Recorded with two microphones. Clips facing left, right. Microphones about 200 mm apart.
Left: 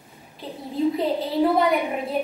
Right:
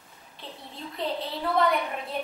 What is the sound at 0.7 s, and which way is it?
A woman's voice, centre (ahead or behind).